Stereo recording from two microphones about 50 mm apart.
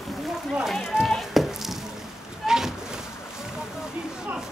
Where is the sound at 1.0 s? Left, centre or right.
Centre.